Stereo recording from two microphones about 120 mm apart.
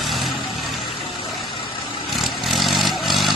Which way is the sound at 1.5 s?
40° left (ahead or behind).